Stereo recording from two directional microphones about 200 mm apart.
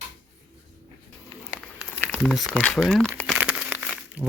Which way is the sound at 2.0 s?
Centre (ahead or behind).